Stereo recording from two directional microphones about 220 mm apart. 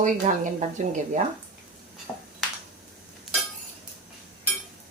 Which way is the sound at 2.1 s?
5° left (ahead or behind).